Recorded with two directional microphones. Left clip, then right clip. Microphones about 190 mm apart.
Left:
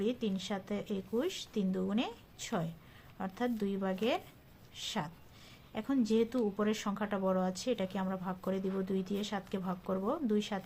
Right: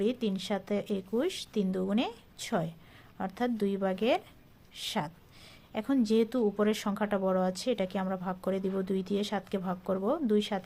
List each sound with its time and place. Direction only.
0.0 s speech: 35° right (ahead or behind)